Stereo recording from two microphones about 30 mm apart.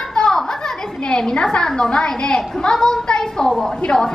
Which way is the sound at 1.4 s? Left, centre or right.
Left.